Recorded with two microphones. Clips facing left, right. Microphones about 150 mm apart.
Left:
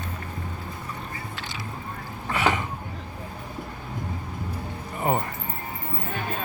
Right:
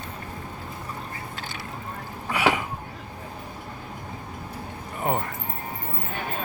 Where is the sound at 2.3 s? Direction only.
10° right (ahead or behind).